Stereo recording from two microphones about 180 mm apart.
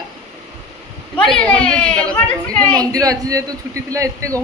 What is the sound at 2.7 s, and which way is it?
Speech, 20° right (ahead or behind).